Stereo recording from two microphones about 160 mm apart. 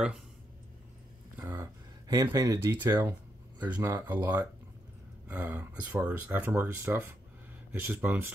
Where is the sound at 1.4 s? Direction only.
15° right (ahead or behind).